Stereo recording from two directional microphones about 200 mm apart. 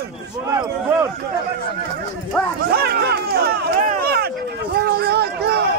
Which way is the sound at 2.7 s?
50° right (ahead or behind).